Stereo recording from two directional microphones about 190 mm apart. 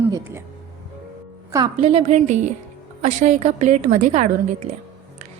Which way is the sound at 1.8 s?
35° right (ahead or behind).